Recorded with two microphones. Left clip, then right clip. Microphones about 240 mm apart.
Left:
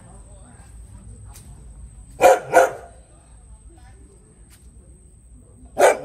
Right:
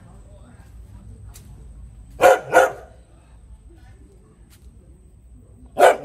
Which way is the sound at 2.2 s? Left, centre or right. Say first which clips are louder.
Even; right.